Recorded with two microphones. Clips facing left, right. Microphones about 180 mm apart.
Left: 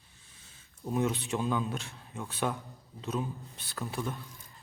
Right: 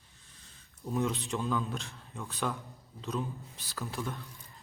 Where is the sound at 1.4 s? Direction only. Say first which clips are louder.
Left 1 dB; 15° left (ahead or behind).